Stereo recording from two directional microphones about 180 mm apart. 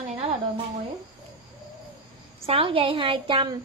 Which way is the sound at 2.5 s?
30° right (ahead or behind).